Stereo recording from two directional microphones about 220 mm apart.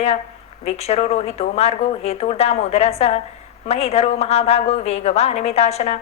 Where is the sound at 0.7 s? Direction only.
30° left (ahead or behind).